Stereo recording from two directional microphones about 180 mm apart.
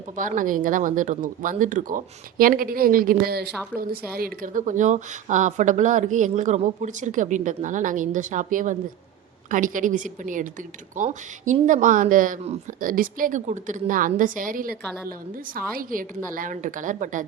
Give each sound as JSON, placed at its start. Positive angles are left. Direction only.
{"t": 0.2, "sound": "a woman's voice", "side_deg": -45}
{"t": 3.5, "sound": "a woman's voice", "side_deg": 0}
{"t": 3.8, "sound": "a woman's voice", "side_deg": -55}